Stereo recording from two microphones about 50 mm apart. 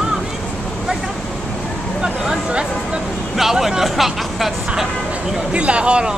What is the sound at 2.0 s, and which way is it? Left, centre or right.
Speech, centre.